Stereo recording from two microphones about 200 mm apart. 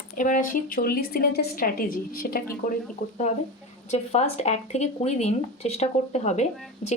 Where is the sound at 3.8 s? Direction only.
35° left (ahead or behind).